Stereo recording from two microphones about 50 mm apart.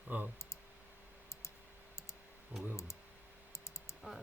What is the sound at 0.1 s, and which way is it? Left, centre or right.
Speech, right.